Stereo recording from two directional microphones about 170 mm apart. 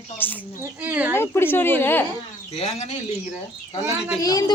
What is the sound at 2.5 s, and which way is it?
Speech, 40° left (ahead or behind).